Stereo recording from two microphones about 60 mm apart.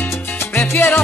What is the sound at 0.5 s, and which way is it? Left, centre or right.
Salsa music, left.